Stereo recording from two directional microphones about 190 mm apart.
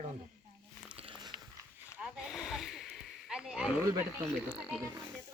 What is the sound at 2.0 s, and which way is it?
Speech, 5° right (ahead or behind).